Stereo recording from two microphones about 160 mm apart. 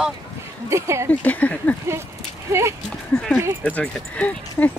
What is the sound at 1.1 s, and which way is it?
Speech, 10° left (ahead or behind).